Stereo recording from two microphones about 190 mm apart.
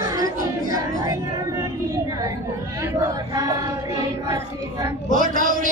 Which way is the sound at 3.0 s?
20° right (ahead or behind).